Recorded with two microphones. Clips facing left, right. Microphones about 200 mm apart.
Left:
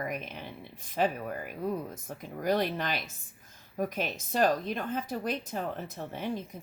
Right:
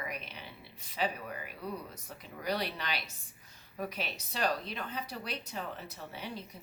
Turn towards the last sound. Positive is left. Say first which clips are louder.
# left 8 dB
turn(degrees=50)  # may be behind; listen again after turning